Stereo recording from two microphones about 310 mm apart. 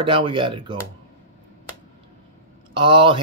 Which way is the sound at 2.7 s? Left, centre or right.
Centre.